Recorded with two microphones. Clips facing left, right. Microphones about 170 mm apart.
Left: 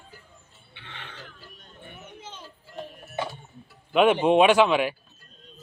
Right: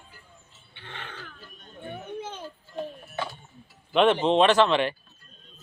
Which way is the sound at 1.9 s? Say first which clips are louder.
Right 9 dB; 55° right (ahead or behind).